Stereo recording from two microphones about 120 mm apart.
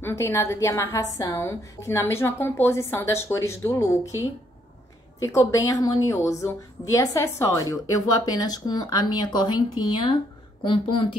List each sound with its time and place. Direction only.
0.0 s a woman's voice: 20° left (ahead or behind)
5.4 s a woman's voice: 30° left (ahead or behind)
10.6 s speech: 45° left (ahead or behind)